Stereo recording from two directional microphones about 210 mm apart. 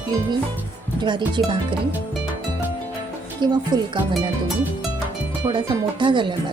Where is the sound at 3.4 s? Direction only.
20° right (ahead or behind).